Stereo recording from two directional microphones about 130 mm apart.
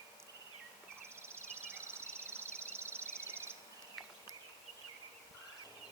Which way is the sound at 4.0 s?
Centre (ahead or behind).